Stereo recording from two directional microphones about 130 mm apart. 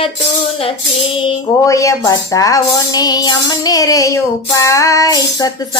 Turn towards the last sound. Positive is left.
turn(degrees=30)  # may be behind; listen again after turning